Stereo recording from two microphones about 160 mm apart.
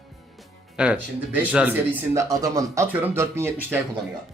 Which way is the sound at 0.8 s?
5° right (ahead or behind).